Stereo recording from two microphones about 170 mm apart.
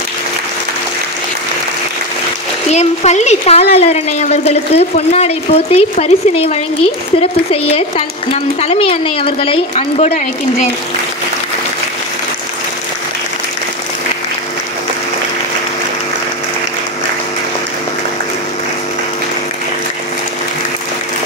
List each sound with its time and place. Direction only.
2.7 s a woman's voice: 40° left (ahead or behind)
8.3 s a woman's voice: 35° left (ahead or behind)